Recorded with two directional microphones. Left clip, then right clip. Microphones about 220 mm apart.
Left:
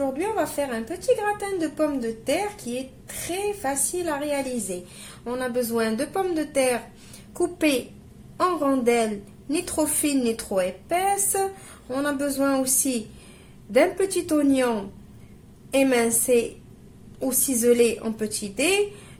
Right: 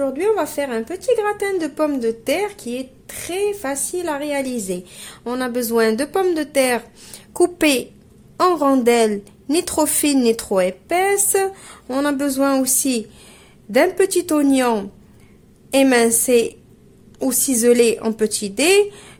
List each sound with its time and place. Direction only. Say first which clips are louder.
0.0 s a woman's voice: right 6 dB; 45° right (ahead or behind)